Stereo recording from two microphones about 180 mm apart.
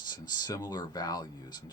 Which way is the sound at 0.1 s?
20° left (ahead or behind).